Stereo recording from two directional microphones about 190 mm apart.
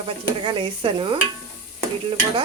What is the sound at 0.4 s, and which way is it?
Stir, 25° right (ahead or behind).